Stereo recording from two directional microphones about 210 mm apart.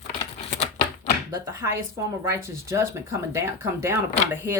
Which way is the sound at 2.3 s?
15° right (ahead or behind).